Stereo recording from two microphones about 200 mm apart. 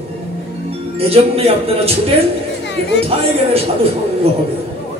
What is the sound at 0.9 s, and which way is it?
Speech, 30° right (ahead or behind).